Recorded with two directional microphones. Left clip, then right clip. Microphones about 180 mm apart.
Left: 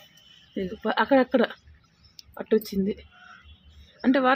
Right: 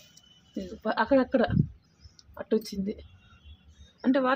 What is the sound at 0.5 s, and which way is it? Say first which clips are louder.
Speech: left 3 dB; 35° left (ahead or behind).